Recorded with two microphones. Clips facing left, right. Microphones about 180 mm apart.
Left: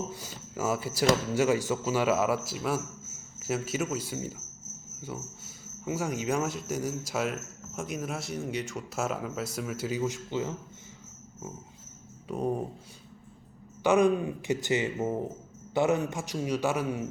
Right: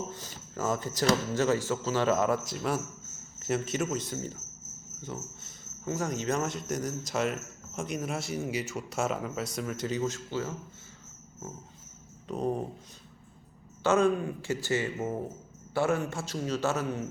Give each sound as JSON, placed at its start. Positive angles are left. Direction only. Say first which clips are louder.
{"t": 0.1, "sound": "speech", "louder": "left 2 dB", "side_deg": 10}
{"t": 12.3, "sound": "speech", "louder": "left 1 dB", "side_deg": 10}
{"t": 13.8, "sound": "speech", "louder": "left 2 dB", "side_deg": 15}